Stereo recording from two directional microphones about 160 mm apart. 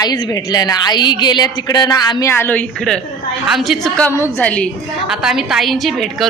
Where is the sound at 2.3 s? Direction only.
15° left (ahead or behind).